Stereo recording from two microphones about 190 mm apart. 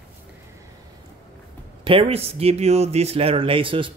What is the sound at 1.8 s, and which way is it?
Speech, 30° right (ahead or behind).